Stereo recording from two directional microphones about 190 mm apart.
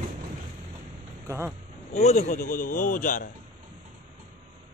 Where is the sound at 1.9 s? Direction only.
35° left (ahead or behind).